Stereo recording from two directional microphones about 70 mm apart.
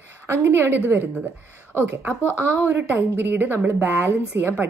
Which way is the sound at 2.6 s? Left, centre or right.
Right.